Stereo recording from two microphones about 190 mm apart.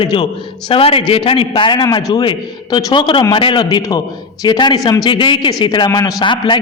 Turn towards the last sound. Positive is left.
turn(degrees=25)  # may be behind; listen again after turning